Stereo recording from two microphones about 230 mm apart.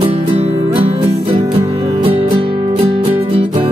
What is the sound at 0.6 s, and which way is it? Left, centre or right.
Music, right.